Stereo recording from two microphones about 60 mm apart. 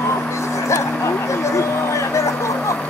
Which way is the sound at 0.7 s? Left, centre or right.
Left.